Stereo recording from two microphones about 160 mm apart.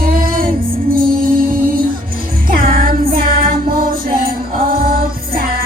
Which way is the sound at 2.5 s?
65° right (ahead or behind).